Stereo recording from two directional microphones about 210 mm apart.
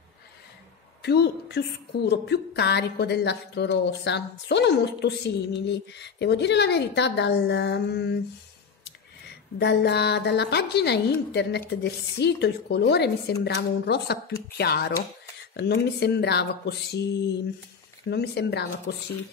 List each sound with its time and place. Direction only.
1.0 s a woman's voice: 50° left (ahead or behind)
9.6 s a woman's voice: 55° left (ahead or behind)
18.1 s a woman's voice: 50° left (ahead or behind)